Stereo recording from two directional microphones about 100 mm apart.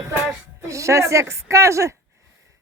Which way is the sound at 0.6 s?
30° right (ahead or behind).